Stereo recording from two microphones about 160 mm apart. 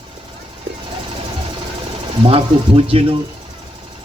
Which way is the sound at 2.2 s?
35° right (ahead or behind).